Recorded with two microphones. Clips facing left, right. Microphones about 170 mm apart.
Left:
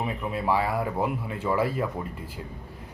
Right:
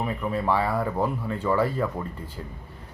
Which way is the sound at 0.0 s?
15° left (ahead or behind).